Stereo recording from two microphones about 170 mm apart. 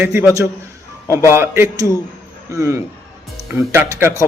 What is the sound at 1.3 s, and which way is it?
Speech, 15° right (ahead or behind).